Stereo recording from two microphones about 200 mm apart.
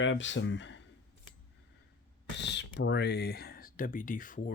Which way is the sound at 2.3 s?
60° left (ahead or behind).